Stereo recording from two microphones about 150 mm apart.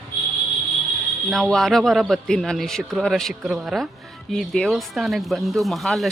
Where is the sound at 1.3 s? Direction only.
Centre (ahead or behind).